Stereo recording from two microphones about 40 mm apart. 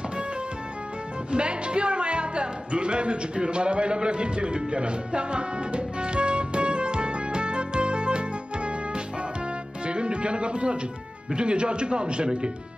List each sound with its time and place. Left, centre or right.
1.3 s music: right
11.3 s a man's voice: right